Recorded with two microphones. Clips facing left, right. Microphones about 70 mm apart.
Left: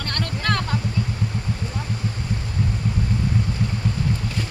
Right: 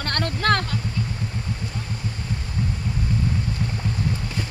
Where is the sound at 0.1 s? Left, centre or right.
Right.